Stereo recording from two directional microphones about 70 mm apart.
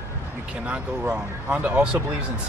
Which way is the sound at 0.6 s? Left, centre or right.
Centre.